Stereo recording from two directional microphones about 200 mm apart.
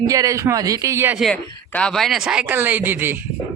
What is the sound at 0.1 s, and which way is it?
Speech, 15° right (ahead or behind).